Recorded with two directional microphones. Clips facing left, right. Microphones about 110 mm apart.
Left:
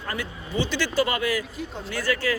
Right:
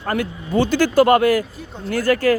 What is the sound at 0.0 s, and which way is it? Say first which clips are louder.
Speech: right 9 dB; 50° right (ahead or behind).